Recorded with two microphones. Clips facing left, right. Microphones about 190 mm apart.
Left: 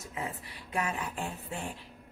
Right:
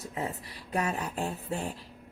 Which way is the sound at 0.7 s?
40° right (ahead or behind).